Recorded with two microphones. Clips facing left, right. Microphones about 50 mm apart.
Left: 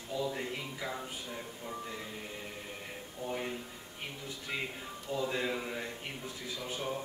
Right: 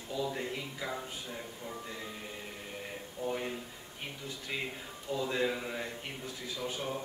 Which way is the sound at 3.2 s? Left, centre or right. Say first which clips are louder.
Right 2 dB; centre.